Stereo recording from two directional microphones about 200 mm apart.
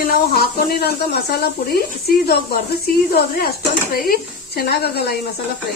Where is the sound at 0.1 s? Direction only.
50° left (ahead or behind).